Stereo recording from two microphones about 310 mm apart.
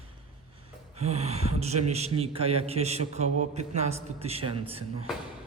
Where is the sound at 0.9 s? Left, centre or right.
Centre.